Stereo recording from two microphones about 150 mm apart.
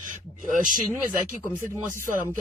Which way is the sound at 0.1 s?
60° right (ahead or behind).